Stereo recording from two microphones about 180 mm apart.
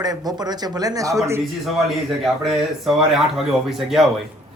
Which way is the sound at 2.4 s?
Centre (ahead or behind).